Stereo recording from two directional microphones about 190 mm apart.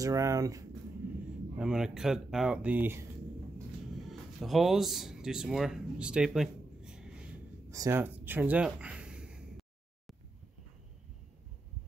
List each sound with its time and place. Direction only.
0.0 s speech: 15° right (ahead or behind)
1.6 s speech: 5° right (ahead or behind)
4.1 s speech: centre (ahead or behind)
7.7 s a sound: 15° right (ahead or behind)